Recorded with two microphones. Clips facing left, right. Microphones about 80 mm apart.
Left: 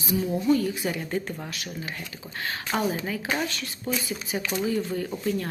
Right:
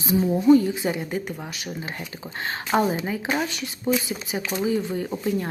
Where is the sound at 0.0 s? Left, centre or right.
Right.